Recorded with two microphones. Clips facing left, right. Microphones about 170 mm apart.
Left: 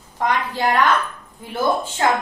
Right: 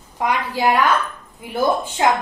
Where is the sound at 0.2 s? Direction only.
10° right (ahead or behind).